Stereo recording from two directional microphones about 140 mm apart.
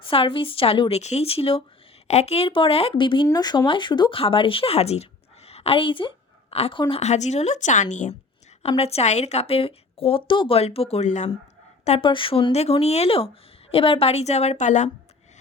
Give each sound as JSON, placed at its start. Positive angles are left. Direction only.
{"t": 0.0, "sound": "a woman's voice", "side_deg": 40}
{"t": 7.0, "sound": "speech", "side_deg": 55}
{"t": 8.6, "sound": "speech", "side_deg": 45}
{"t": 11.9, "sound": "speech", "side_deg": 40}